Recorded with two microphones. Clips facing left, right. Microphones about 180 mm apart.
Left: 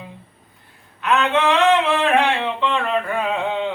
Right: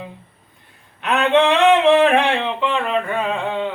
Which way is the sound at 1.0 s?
25° right (ahead or behind).